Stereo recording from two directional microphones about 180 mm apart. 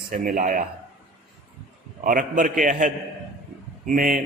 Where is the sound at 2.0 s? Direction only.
50° right (ahead or behind).